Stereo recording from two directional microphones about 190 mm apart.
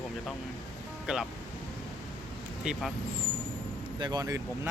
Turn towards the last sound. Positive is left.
turn(degrees=-20)  # may be behind; listen again after turning